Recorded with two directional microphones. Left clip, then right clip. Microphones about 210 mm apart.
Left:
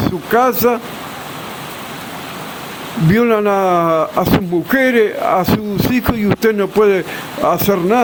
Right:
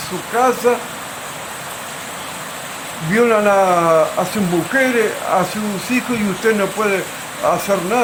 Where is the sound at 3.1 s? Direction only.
50° left (ahead or behind).